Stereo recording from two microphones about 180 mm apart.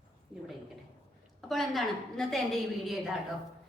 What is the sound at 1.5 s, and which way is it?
A woman's voice, centre (ahead or behind).